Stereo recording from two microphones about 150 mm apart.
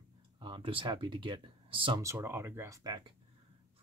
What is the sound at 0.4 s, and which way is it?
Speech, 35° right (ahead or behind).